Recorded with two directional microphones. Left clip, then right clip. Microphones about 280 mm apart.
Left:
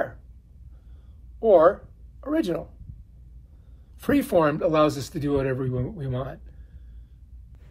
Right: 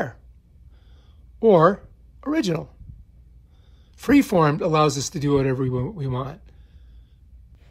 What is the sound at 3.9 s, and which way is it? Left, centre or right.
Speech, right.